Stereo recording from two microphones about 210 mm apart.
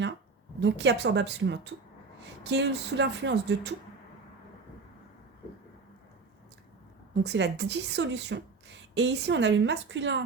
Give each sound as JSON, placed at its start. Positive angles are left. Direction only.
{"t": 0.6, "sound": "speech", "side_deg": -55}
{"t": 7.1, "sound": "speech", "side_deg": -55}